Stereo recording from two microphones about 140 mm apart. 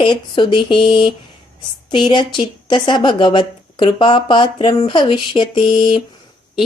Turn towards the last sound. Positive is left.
turn(degrees=35)  # may be behind; listen again after turning